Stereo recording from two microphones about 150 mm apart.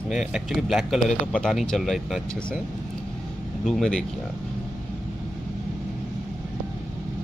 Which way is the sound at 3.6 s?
Centre (ahead or behind).